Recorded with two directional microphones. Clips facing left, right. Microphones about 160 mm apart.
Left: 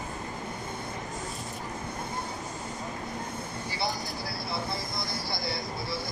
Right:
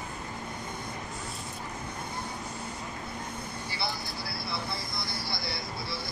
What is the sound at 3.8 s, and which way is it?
Vehicle, 40° left (ahead or behind).